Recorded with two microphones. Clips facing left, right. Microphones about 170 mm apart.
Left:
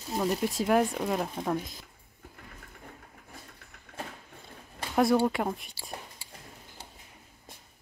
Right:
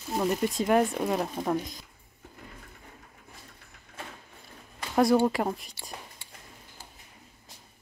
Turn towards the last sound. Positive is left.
turn(degrees=0)  # may be behind; listen again after turning